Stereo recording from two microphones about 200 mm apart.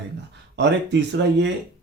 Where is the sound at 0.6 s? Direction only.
60° right (ahead or behind).